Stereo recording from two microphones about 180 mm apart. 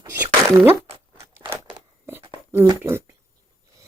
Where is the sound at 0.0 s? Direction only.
10° right (ahead or behind).